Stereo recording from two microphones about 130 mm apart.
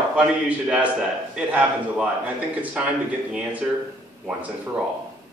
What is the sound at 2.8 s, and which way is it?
A man's voice, 5° right (ahead or behind).